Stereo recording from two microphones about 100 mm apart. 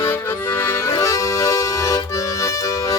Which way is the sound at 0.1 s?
20° left (ahead or behind).